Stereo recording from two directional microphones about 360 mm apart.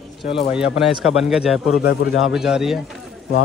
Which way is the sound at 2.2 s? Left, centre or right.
Centre.